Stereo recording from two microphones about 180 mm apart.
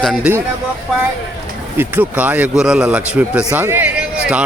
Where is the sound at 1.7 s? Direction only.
10° right (ahead or behind).